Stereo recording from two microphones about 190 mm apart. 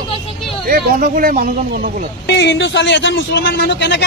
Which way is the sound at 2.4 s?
70° left (ahead or behind).